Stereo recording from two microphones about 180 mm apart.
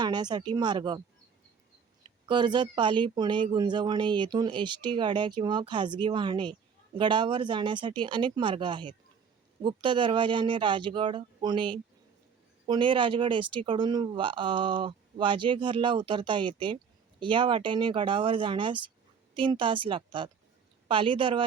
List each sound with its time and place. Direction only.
0.0 s speech: 25° right (ahead or behind)
2.0 s speech: 25° right (ahead or behind)